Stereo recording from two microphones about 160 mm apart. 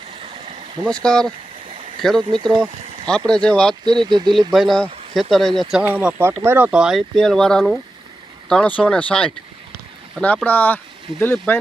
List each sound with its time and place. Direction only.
0.2 s stream: 35° right (ahead or behind)
0.9 s speech: 5° left (ahead or behind)
4.0 s speech: 30° right (ahead or behind)
4.5 s speech: centre (ahead or behind)